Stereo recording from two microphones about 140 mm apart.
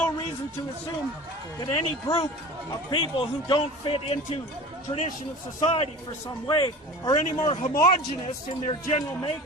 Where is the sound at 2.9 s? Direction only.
35° left (ahead or behind).